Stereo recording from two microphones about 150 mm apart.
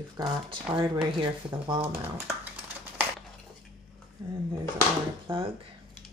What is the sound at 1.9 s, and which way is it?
Speech, 15° right (ahead or behind).